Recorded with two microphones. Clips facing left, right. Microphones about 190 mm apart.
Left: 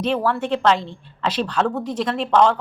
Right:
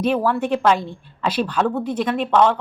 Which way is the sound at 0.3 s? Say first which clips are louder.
Right 1 dB; 10° right (ahead or behind).